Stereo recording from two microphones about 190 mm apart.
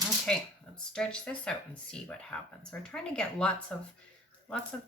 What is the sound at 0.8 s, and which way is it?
Speech, 5° left (ahead or behind).